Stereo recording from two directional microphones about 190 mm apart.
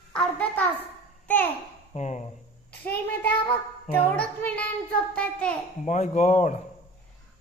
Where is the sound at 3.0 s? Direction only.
10° left (ahead or behind).